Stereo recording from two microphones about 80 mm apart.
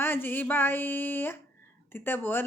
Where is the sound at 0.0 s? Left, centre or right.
Left.